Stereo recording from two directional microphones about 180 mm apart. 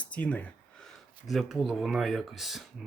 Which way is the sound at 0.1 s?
10° left (ahead or behind).